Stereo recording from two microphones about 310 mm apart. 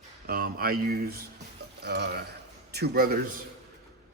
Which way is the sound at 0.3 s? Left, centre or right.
Right.